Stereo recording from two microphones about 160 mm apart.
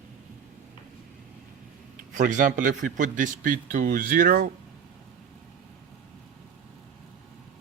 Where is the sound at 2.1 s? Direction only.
50° right (ahead or behind).